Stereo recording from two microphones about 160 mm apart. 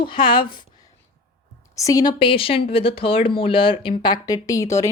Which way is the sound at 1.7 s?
20° left (ahead or behind).